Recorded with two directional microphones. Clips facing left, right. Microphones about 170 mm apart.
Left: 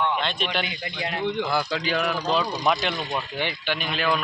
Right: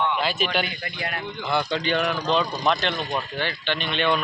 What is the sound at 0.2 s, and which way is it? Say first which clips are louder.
Speech: right 3 dB; 5° right (ahead or behind).